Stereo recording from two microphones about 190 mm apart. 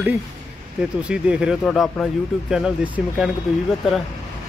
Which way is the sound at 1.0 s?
5° right (ahead or behind).